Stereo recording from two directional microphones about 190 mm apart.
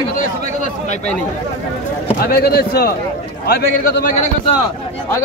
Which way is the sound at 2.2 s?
55° left (ahead or behind).